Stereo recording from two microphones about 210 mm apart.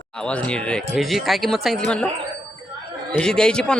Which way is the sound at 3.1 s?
5° left (ahead or behind).